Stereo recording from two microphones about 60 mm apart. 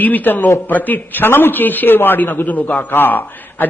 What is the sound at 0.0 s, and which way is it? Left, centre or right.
A man's voice, left.